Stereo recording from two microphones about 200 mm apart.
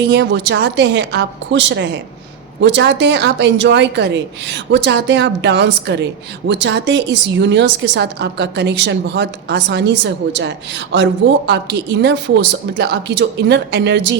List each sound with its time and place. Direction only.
0.0 s a woman's voice: 60° right (ahead or behind)